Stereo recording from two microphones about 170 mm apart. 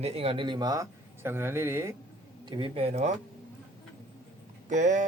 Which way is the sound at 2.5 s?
30° right (ahead or behind).